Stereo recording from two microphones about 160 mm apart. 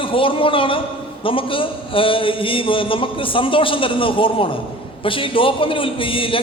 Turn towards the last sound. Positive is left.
turn(degrees=35)  # may be behind; listen again after turning